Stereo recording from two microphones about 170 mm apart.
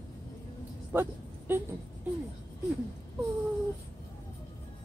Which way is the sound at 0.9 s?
15° right (ahead or behind).